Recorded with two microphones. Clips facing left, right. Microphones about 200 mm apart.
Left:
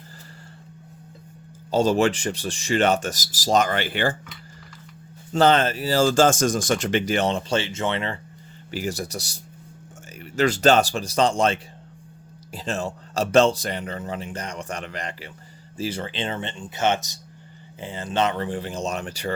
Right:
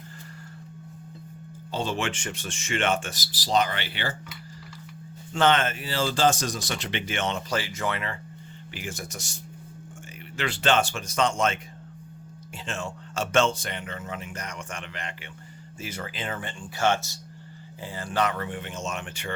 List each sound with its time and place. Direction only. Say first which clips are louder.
1.7 s speech: left 10 dB; 40° left (ahead or behind)
5.3 s speech: left 4 dB; 35° left (ahead or behind)